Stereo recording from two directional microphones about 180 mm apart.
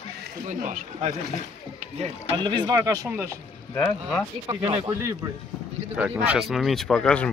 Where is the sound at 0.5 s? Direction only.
45° right (ahead or behind).